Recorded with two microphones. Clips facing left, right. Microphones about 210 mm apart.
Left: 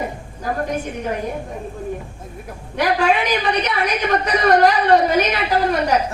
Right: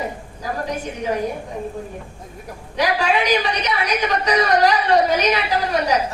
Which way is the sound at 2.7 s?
55° left (ahead or behind).